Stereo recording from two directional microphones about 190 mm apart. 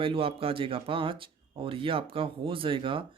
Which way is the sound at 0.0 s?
30° right (ahead or behind).